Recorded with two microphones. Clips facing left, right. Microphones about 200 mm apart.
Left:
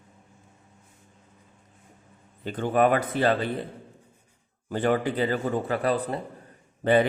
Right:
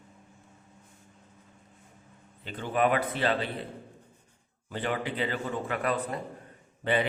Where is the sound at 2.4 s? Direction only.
45° left (ahead or behind).